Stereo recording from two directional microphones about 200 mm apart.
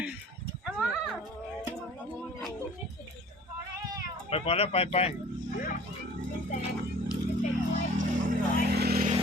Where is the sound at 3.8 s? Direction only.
20° right (ahead or behind).